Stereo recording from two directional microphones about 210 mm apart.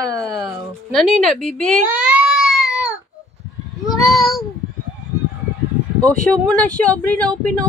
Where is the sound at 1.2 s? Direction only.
5° left (ahead or behind).